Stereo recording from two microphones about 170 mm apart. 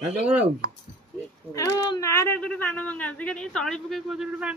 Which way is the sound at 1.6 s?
20° left (ahead or behind).